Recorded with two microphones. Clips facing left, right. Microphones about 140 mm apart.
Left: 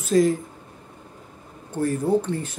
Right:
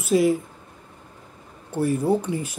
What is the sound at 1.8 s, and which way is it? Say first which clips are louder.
Speech: even; 10° right (ahead or behind).